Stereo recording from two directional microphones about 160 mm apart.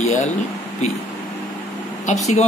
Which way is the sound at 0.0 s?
45° left (ahead or behind).